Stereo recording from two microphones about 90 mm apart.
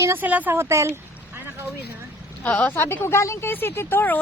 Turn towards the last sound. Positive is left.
turn(degrees=20)  # may be behind; listen again after turning